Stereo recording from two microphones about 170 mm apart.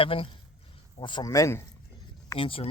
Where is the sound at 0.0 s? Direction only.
30° left (ahead or behind).